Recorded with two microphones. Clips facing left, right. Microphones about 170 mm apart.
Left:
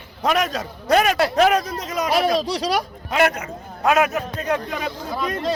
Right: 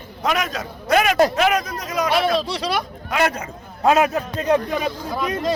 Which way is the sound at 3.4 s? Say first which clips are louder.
Even; 30° right (ahead or behind).